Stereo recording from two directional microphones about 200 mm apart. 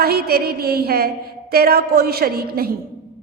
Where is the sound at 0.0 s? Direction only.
50° right (ahead or behind).